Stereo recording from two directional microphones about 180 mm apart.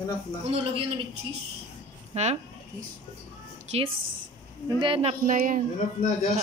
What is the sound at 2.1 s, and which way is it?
Speech, 40° right (ahead or behind).